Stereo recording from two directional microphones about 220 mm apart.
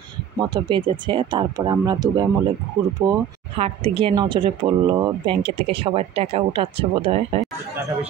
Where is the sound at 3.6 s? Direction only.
25° right (ahead or behind).